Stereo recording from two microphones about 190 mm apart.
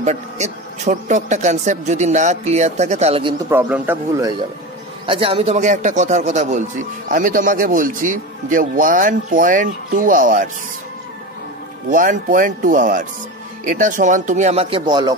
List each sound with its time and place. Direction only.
0.0 s speech: 40° right (ahead or behind)
3.4 s speech: 10° right (ahead or behind)
5.0 s speech: 30° right (ahead or behind)
11.9 s speech: 45° right (ahead or behind); by 15.1 s 20° right (ahead or behind)